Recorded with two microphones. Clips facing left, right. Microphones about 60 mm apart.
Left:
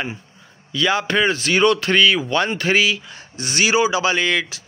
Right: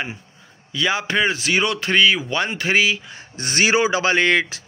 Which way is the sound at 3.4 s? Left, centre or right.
Right.